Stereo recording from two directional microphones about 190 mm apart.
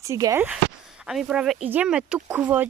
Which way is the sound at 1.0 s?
5° right (ahead or behind).